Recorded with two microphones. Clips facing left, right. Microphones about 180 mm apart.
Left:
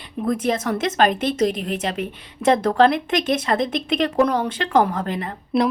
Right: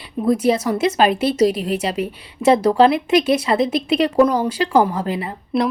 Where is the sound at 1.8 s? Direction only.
5° right (ahead or behind).